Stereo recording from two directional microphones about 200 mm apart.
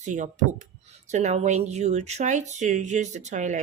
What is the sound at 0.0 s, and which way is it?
Speech, 40° right (ahead or behind).